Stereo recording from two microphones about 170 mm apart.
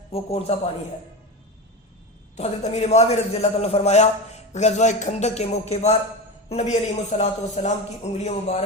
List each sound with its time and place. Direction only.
0.1 s a man's voice: 35° left (ahead or behind)
2.3 s a man's voice: 40° left (ahead or behind)